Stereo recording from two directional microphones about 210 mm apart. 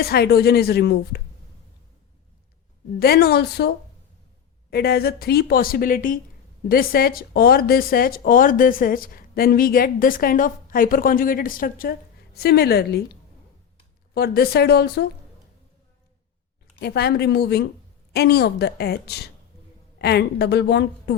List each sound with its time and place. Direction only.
0.0 s speech: 50° left (ahead or behind)
3.0 s speech: 50° left (ahead or behind)
4.7 s speech: 50° left (ahead or behind)
14.1 s speech: 50° left (ahead or behind)
16.8 s speech: 50° left (ahead or behind)